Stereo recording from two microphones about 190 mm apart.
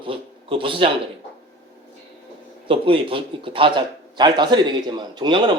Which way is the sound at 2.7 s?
30° right (ahead or behind).